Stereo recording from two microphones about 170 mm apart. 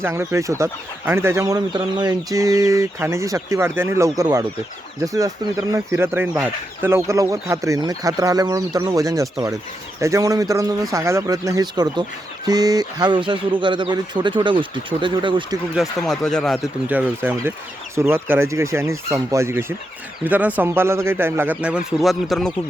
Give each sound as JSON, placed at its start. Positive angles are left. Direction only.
{"t": 0.0, "sound": "speech", "side_deg": -15}
{"t": 15.7, "sound": "speech", "side_deg": 0}
{"t": 16.9, "sound": "speech", "side_deg": -10}